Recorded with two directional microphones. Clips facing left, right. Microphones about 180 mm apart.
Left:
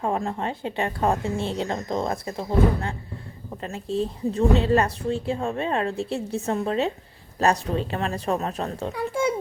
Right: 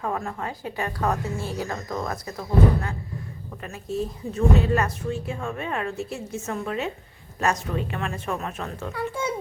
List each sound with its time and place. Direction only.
0.0 s a woman's voice: 25° left (ahead or behind)
8.9 s a child's voice: 10° left (ahead or behind)